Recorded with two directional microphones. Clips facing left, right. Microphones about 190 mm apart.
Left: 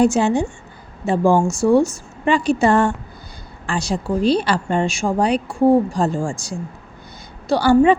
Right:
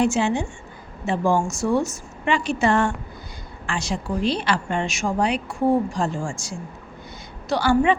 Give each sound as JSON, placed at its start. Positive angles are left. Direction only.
{"t": 0.0, "sound": "a woman's voice", "side_deg": 40}